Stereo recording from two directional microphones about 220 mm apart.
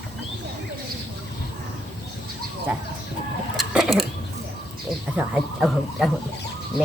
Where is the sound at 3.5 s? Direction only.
Centre (ahead or behind).